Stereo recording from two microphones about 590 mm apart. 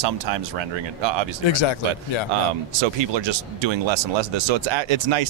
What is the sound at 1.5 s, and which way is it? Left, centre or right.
Speech, left.